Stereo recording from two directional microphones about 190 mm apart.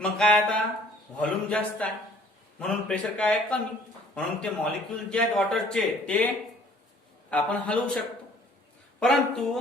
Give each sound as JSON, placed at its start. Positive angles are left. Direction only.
{"t": 0.0, "sound": "a man's voice", "side_deg": 5}
{"t": 7.3, "sound": "a man's voice", "side_deg": 5}
{"t": 9.0, "sound": "speech", "side_deg": 5}